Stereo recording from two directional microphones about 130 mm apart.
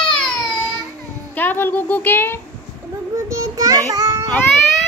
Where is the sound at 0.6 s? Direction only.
30° right (ahead or behind).